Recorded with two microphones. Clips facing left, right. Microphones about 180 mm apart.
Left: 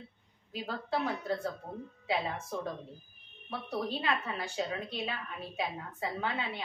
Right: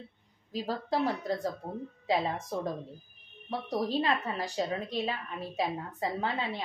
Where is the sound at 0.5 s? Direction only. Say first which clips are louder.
Right 4 dB; 35° right (ahead or behind).